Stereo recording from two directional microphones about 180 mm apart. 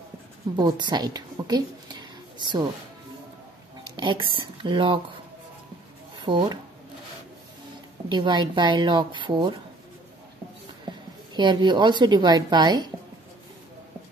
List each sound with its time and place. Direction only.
0.6 s a woman's voice: 25° right (ahead or behind)
3.8 s speech: 25° right (ahead or behind)
6.2 s speech: 25° right (ahead or behind)
8.1 s speech: 25° right (ahead or behind)
10.9 s a woman's voice: 25° right (ahead or behind)